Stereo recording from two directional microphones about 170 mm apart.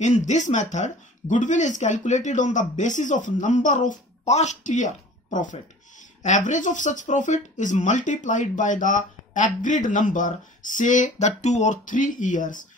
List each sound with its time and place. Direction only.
0.0 s speech: 45° left (ahead or behind)